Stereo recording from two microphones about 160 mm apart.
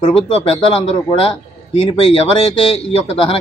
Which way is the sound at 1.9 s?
35° left (ahead or behind).